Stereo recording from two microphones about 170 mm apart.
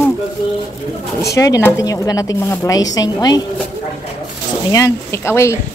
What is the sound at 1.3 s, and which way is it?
A woman's voice, 20° left (ahead or behind).